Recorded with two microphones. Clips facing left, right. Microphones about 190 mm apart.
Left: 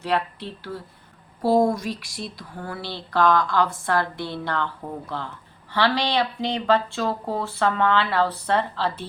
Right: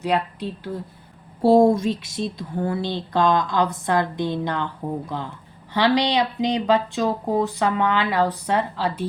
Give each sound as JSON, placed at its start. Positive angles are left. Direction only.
{"t": 0.0, "sound": "speech", "side_deg": -15}
{"t": 1.4, "sound": "speech", "side_deg": -30}